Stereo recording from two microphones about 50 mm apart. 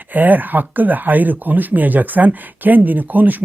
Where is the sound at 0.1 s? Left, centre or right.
Right.